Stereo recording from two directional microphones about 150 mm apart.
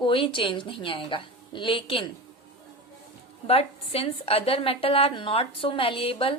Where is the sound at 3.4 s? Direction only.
40° left (ahead or behind).